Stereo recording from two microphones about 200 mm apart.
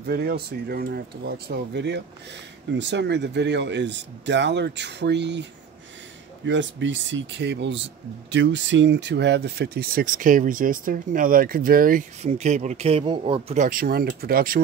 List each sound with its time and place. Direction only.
0.0 s speech: 50° right (ahead or behind); by 13.7 s 30° right (ahead or behind)
13.7 s speech: 45° right (ahead or behind)